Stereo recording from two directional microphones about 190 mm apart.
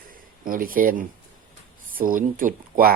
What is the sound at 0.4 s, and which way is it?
Speech, 45° right (ahead or behind).